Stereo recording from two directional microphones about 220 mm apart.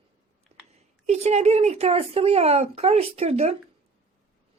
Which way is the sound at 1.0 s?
30° right (ahead or behind).